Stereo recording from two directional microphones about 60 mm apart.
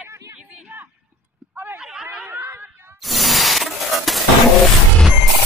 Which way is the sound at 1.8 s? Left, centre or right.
Centre.